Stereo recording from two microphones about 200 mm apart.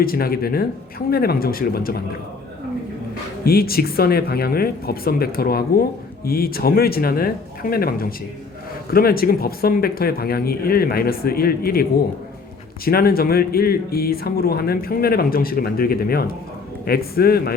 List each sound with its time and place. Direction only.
0.0 s speech: 50° left (ahead or behind)
3.4 s speech: 50° left (ahead or behind)